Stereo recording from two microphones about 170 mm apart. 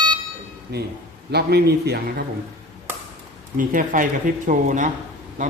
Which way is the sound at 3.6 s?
50° right (ahead or behind).